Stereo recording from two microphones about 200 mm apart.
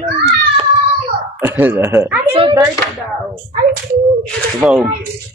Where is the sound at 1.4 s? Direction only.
10° right (ahead or behind).